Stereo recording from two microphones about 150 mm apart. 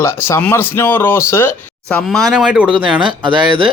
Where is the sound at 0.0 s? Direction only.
15° left (ahead or behind); by 2.6 s 5° right (ahead or behind).